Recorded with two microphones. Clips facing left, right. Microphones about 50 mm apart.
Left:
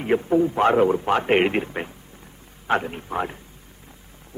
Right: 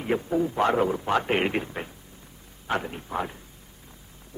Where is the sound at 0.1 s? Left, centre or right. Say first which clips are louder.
Left 6 dB; left.